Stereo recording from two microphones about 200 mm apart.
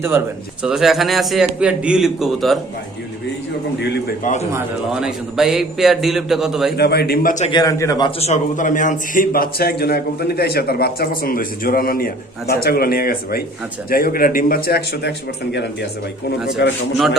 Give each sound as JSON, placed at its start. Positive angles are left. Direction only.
{"t": 0.6, "sound": "a man's voice", "side_deg": 0}
{"t": 3.8, "sound": "a man's voice", "side_deg": 55}
{"t": 4.5, "sound": "a man's voice", "side_deg": -5}
{"t": 6.7, "sound": "a man's voice", "side_deg": 55}
{"t": 7.5, "sound": "a man's voice", "side_deg": 15}
{"t": 8.3, "sound": "a man's voice", "side_deg": 40}
{"t": 16.5, "sound": "a man's voice", "side_deg": 60}